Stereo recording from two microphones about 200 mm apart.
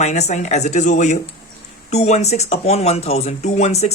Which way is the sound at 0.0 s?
35° left (ahead or behind).